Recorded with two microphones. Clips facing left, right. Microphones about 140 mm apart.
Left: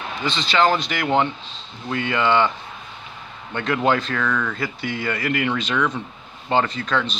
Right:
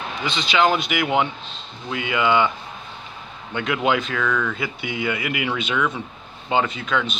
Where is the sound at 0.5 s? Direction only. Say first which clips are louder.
Even; 10° right (ahead or behind).